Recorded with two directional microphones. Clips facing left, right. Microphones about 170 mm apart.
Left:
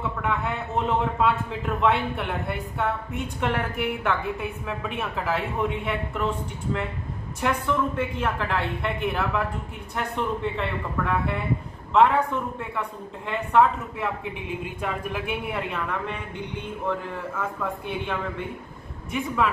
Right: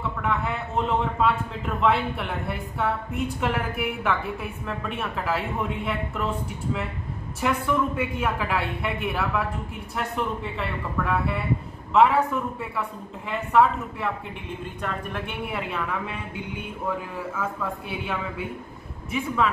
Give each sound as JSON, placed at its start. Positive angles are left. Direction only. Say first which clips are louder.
{"t": 0.0, "sound": "a woman's voice", "louder": "even", "side_deg": 0}
{"t": 7.3, "sound": "a woman's voice", "louder": "right 1 dB", "side_deg": -5}
{"t": 17.4, "sound": "a woman's voice", "louder": "even", "side_deg": -5}